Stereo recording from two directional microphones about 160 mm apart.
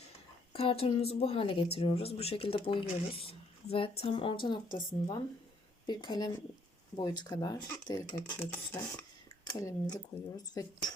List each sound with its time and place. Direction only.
0.5 s speech: 35° left (ahead or behind); by 8.4 s 20° left (ahead or behind)
8.5 s speech: 10° left (ahead or behind)
9.6 s speech: 25° left (ahead or behind)